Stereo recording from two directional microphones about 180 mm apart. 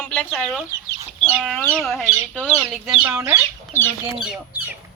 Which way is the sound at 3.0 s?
15° right (ahead or behind).